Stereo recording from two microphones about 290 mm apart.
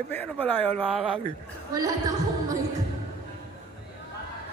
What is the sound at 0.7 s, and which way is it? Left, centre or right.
A woman's voice, centre.